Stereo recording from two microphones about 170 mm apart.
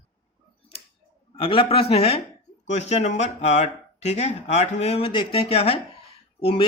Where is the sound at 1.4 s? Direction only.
30° left (ahead or behind).